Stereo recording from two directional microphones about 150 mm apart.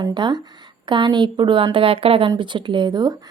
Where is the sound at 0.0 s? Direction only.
30° right (ahead or behind).